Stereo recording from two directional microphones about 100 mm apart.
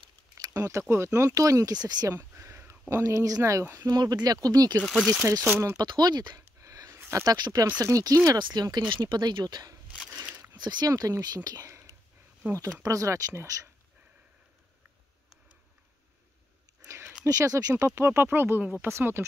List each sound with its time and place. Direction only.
0.6 s speech: 30° right (ahead or behind)
2.1 s a sound: 25° right (ahead or behind)
2.9 s speech: 30° right (ahead or behind)
4.9 s speech: centre (ahead or behind)
5.5 s speech: 25° right (ahead or behind)
5.8 s speech: 45° right (ahead or behind)
6.6 s a sound: 35° right (ahead or behind)
7.2 s speech: 40° right (ahead or behind)
8.3 s speech: 45° right (ahead or behind)
10.9 s speech: 35° right (ahead or behind)
12.8 s speech: 30° right (ahead or behind)
16.8 s a sound: 30° right (ahead or behind)
17.2 s speech: 35° right (ahead or behind)